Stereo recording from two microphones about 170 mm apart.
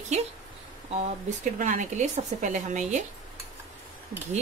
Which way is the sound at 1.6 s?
45° right (ahead or behind).